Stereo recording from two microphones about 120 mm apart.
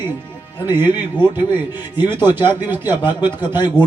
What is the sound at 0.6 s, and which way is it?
Speech, 40° left (ahead or behind).